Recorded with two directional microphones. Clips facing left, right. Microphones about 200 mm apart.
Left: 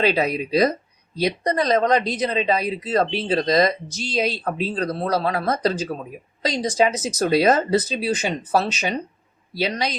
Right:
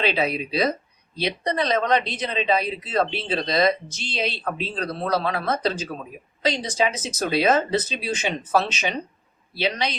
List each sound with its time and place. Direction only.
0.0 s speech: 40° left (ahead or behind)